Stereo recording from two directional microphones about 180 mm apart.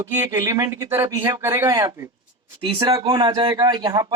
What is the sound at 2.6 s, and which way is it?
Speech, 25° right (ahead or behind).